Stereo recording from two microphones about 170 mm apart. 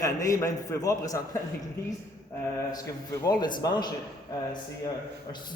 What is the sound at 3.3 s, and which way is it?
Speech, 25° left (ahead or behind).